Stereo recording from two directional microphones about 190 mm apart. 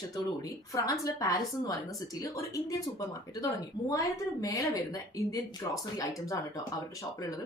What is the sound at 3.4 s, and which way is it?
Speech, 15° left (ahead or behind).